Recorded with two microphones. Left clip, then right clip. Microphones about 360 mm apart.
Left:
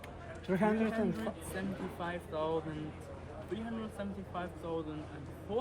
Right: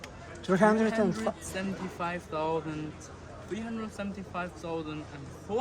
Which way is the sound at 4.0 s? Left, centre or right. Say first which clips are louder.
Right 6 dB; right.